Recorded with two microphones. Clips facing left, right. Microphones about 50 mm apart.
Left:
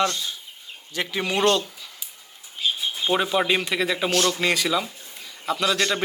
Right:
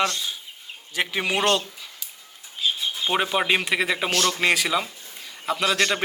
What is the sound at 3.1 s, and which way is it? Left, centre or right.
A man's voice, centre.